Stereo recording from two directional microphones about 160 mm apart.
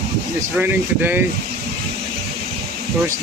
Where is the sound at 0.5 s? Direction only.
10° right (ahead or behind).